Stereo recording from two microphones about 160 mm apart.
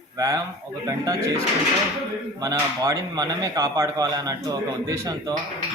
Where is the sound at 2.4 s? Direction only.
20° right (ahead or behind).